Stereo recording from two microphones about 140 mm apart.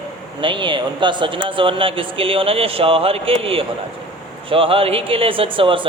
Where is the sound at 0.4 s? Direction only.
35° right (ahead or behind).